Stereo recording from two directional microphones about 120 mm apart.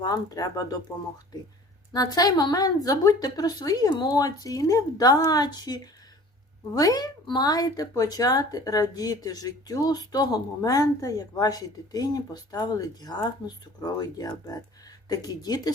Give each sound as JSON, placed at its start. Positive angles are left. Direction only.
{"t": 0.0, "sound": "speech", "side_deg": 30}
{"t": 1.9, "sound": "speech", "side_deg": 30}